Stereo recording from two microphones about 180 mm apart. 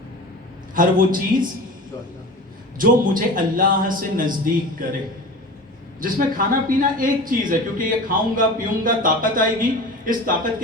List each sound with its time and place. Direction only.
0.7 s speech: 50° right (ahead or behind)
2.7 s speech: 50° right (ahead or behind)
6.0 s speech: 50° right (ahead or behind)